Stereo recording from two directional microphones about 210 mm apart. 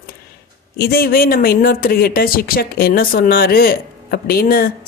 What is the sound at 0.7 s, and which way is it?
Speech, 45° left (ahead or behind).